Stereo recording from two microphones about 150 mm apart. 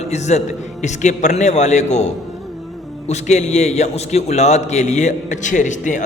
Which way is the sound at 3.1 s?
50° left (ahead or behind).